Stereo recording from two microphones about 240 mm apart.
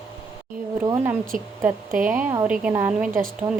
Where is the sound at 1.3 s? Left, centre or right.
Right.